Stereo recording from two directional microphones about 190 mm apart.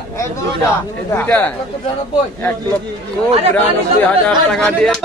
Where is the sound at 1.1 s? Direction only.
10° left (ahead or behind).